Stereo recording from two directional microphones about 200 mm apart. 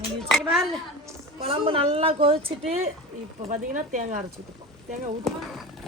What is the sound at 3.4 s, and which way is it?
Speech, 40° right (ahead or behind).